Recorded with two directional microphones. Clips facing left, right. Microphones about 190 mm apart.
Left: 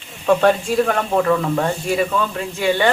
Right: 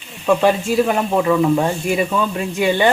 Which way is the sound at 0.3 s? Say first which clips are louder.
Even; 5° right (ahead or behind).